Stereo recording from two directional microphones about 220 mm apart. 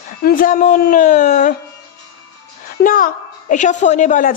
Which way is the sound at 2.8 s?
40° left (ahead or behind).